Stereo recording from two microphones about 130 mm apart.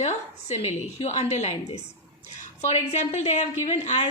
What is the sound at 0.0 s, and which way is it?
A woman's voice, 60° left (ahead or behind).